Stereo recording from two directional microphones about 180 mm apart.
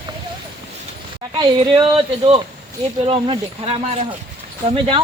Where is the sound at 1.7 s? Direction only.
30° right (ahead or behind).